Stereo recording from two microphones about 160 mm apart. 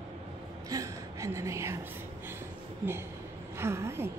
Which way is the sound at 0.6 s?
20° right (ahead or behind).